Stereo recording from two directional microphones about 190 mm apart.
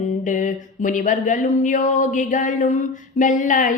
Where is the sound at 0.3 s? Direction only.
40° left (ahead or behind).